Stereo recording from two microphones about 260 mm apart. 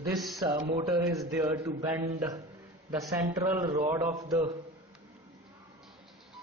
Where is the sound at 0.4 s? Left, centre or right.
Centre.